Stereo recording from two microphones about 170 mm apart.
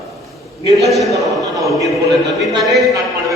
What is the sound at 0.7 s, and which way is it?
Speech, centre (ahead or behind).